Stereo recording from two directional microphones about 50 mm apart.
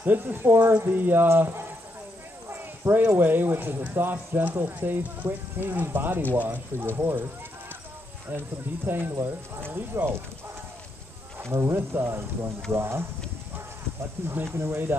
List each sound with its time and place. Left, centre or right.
0.0 s speech: right
0.7 s speech: right
2.5 s clip-clop: right
3.2 s speech: right
8.3 s speech: right
11.3 s speech: right
14.4 s speech: right